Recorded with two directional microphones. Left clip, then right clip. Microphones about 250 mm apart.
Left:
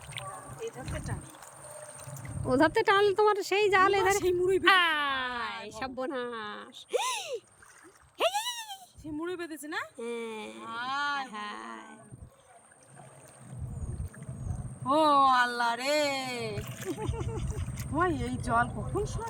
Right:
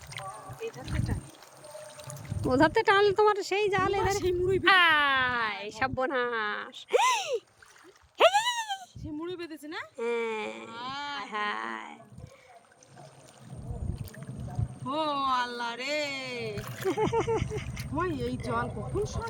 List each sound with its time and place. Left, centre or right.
2.4 s speech: centre
8.2 s a sound: centre
9.2 s speech: centre
10.0 s speech: centre
10.7 s speech: centre
11.2 s speech: centre
14.8 s speech: centre
16.6 s speech: centre
17.9 s speech: centre